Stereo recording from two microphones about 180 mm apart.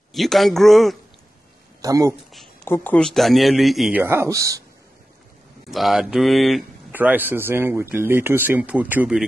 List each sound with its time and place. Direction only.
0.1 s speech: centre (ahead or behind)
1.8 s speech: 20° right (ahead or behind)
2.6 s speech: 10° left (ahead or behind)
4.0 s speech: 15° right (ahead or behind)
5.7 s speech: centre (ahead or behind)